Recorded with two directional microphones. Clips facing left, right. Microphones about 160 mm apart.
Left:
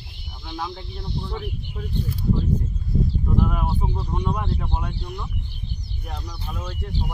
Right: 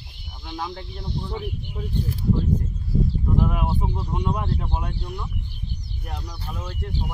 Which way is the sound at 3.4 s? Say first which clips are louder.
Even; 10° right (ahead or behind).